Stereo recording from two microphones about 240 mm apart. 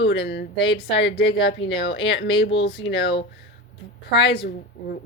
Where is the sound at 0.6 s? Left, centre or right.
Left.